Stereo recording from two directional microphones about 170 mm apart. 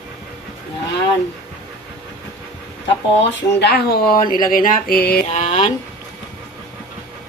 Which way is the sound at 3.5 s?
70° left (ahead or behind).